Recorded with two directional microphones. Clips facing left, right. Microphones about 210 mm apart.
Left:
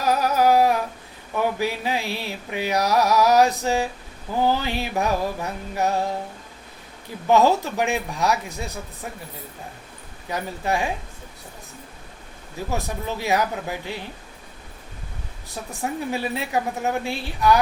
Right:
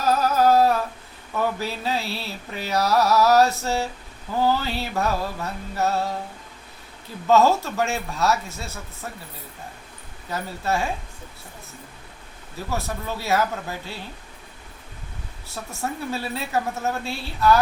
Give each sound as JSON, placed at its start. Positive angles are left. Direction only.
{"t": 0.0, "sound": "humming", "side_deg": 15}
{"t": 1.4, "sound": "music", "side_deg": 15}
{"t": 7.3, "sound": "music", "side_deg": 15}
{"t": 10.2, "sound": "music", "side_deg": 15}
{"t": 12.7, "sound": "music", "side_deg": 15}
{"t": 15.4, "sound": "music", "side_deg": 15}